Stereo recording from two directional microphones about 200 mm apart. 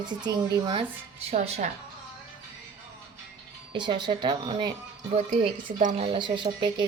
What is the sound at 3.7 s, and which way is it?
Speech, 20° right (ahead or behind).